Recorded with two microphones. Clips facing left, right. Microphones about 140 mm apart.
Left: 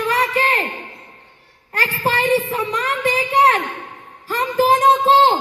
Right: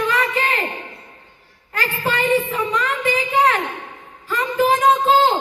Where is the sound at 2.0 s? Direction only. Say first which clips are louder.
Left 1 dB; 35° left (ahead or behind).